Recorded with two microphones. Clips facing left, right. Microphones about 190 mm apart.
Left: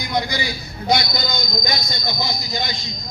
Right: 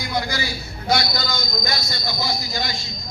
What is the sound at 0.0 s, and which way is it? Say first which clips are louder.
A man's voice: left 2 dB; 20° left (ahead or behind).